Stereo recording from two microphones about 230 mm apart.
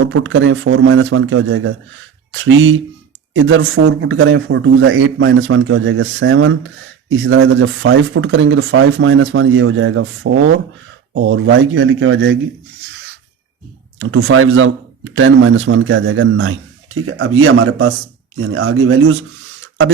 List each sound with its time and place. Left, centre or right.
0.1 s speech: right
14.0 s speech: right